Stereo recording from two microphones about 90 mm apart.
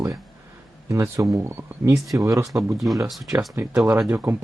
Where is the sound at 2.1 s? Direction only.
40° right (ahead or behind).